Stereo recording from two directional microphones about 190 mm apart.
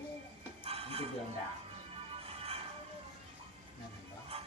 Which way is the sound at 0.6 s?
30° right (ahead or behind).